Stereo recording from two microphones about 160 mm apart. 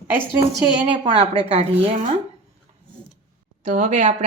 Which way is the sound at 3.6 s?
45° right (ahead or behind).